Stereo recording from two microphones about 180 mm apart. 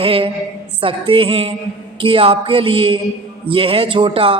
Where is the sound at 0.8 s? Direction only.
30° right (ahead or behind).